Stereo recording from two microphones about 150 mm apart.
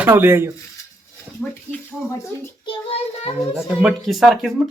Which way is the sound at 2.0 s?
20° left (ahead or behind).